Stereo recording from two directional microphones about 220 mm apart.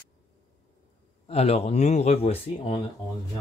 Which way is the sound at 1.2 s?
30° left (ahead or behind).